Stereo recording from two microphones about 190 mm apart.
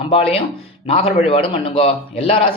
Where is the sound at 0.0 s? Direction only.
30° left (ahead or behind).